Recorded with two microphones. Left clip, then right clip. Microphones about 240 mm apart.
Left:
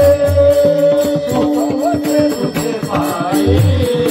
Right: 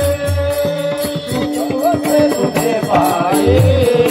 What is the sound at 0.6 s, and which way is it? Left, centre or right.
Music, left.